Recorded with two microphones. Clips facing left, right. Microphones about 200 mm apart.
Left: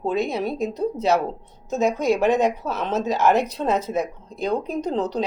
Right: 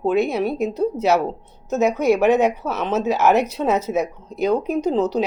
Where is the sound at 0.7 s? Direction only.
70° right (ahead or behind).